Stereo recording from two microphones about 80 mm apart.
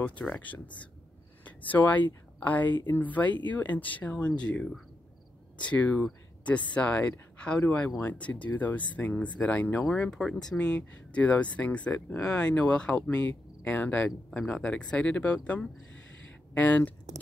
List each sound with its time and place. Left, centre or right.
0.0 s speech: centre
1.7 s speech: left
5.7 s speech: centre